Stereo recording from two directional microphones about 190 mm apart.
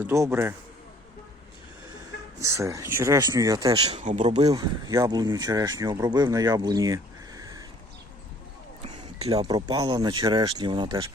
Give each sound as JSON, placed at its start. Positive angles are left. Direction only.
{"t": 0.0, "sound": "speech", "side_deg": -15}
{"t": 2.4, "sound": "speech", "side_deg": -15}
{"t": 3.8, "sound": "speech", "side_deg": -35}
{"t": 4.4, "sound": "speech", "side_deg": -20}
{"t": 9.3, "sound": "speech", "side_deg": -20}